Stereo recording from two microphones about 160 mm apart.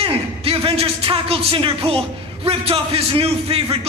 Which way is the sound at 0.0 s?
35° right (ahead or behind).